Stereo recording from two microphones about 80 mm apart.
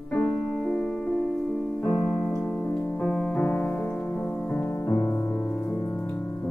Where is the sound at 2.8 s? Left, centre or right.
Left.